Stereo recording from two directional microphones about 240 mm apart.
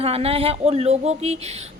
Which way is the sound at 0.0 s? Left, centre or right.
Right.